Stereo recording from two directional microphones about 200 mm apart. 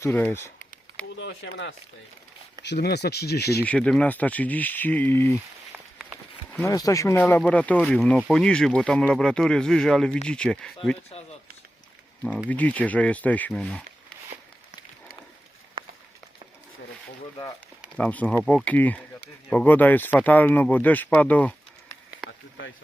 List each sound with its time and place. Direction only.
0.0 s a sound: 10° left (ahead or behind)
1.1 s speech: 70° left (ahead or behind)
2.6 s speech: 55° left (ahead or behind)
3.7 s speech: 5° left (ahead or behind)
5.7 s a sound: 5° right (ahead or behind)
6.5 s speech: 10° left (ahead or behind)
12.5 s speech: 5° left (ahead or behind)
15.8 s run: 25° right (ahead or behind)
17.9 s speech: 5° left (ahead or behind)
22.2 s a sound: centre (ahead or behind)